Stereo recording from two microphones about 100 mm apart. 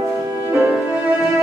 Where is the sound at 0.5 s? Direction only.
15° right (ahead or behind).